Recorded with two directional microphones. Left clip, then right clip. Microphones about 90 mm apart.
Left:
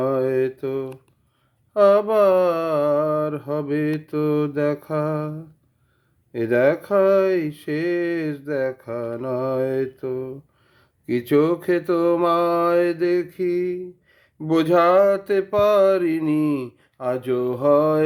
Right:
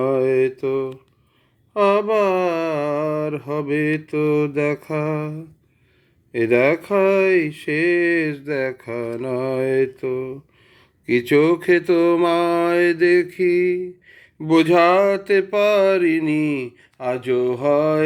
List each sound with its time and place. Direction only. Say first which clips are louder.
0.0 s mantra: right 3 dB; 35° left (ahead or behind)
1.7 s speech: left 1 dB; 50° left (ahead or behind); by 13.8 s 30° left (ahead or behind)
14.4 s speech: right 2 dB; 40° left (ahead or behind)